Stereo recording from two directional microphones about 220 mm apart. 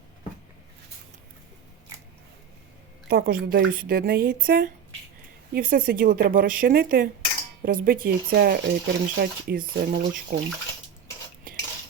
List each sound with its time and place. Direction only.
3.1 s speech: 45° right (ahead or behind)
11.5 s cutlery: 40° right (ahead or behind)